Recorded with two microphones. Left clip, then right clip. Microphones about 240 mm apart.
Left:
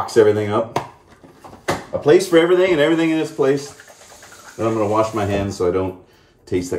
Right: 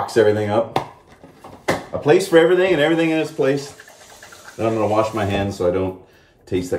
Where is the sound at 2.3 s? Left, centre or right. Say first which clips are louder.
Even; centre.